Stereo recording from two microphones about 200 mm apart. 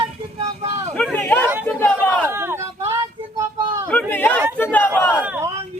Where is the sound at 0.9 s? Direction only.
5° left (ahead or behind).